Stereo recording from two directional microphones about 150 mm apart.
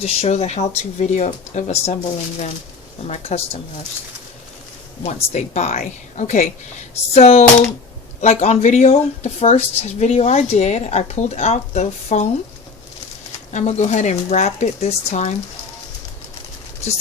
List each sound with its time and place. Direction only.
0.0 s speech: 45° left (ahead or behind)
3.1 s speech: 40° left (ahead or behind)
5.0 s speech: 50° left (ahead or behind)
13.5 s speech: 50° left (ahead or behind)